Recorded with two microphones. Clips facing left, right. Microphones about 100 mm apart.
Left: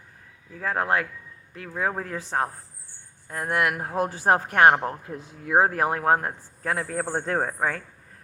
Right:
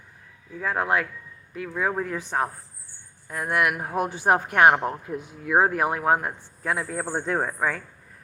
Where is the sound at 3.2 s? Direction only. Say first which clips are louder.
Right 1 dB; 30° left (ahead or behind).